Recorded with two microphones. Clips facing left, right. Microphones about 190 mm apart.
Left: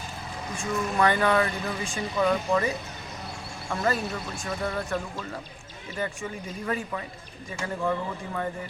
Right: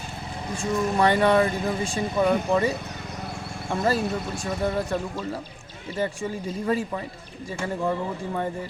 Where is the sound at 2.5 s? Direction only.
25° right (ahead or behind).